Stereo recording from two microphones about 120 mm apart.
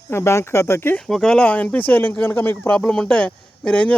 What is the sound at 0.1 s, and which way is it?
Speech, 20° left (ahead or behind).